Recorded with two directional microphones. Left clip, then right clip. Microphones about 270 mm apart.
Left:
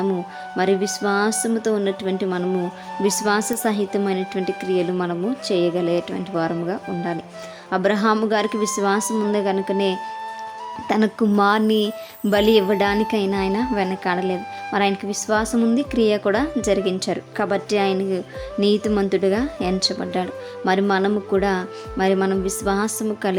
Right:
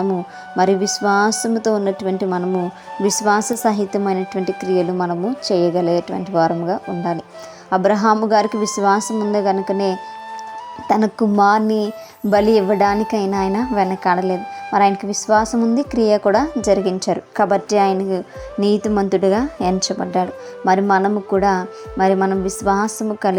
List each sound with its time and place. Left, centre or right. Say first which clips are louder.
0.5 s a woman's voice: right 4 dB; centre
1.5 s a woman's voice: right 3 dB; centre
1.8 s a woman's voice: right 3 dB; centre